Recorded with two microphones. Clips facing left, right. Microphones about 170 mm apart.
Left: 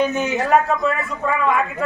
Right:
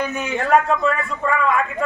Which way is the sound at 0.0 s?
20° left (ahead or behind).